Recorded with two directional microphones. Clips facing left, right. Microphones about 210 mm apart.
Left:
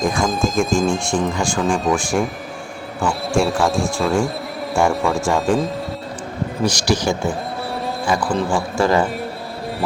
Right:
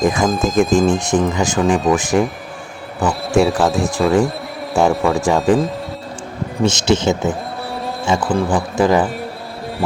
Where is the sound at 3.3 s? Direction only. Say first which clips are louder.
Right 4 dB; centre (ahead or behind).